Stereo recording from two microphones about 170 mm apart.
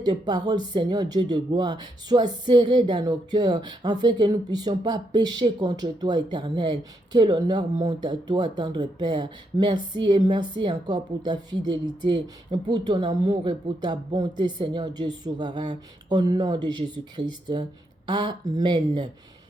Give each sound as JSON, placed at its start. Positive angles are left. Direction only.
{"t": 0.0, "sound": "a woman's voice", "side_deg": -25}